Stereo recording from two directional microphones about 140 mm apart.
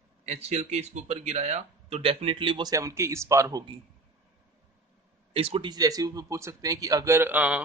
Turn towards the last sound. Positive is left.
turn(degrees=-10)  # may be behind; listen again after turning